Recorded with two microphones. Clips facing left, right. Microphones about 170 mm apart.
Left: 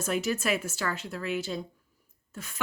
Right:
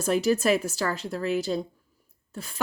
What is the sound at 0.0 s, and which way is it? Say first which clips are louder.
Speech: right 6 dB; 35° right (ahead or behind).